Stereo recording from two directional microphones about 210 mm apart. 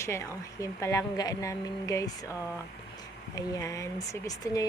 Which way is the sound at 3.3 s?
15° left (ahead or behind).